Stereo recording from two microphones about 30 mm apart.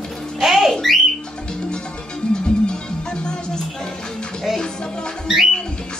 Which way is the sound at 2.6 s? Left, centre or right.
Left.